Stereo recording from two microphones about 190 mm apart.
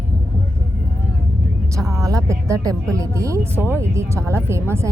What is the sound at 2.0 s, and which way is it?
Speech, 15° right (ahead or behind).